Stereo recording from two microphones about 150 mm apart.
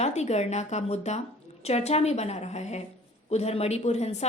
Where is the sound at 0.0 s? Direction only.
45° left (ahead or behind).